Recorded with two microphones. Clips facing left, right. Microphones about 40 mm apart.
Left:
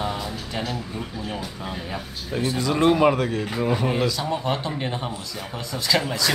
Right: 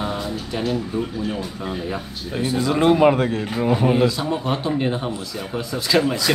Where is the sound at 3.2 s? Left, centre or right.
Right.